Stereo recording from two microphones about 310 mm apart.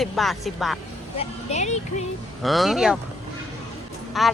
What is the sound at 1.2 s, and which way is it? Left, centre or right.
Speech, left.